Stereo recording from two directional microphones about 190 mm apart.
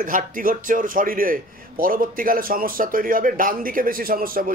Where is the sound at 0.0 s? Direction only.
45° right (ahead or behind).